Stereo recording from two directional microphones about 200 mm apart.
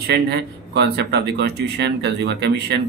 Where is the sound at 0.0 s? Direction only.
55° right (ahead or behind).